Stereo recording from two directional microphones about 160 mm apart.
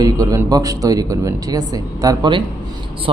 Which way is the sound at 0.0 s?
20° right (ahead or behind).